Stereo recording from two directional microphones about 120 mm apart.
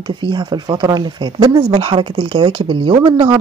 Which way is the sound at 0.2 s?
40° right (ahead or behind).